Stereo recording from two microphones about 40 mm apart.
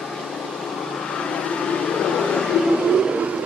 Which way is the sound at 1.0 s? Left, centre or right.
Centre.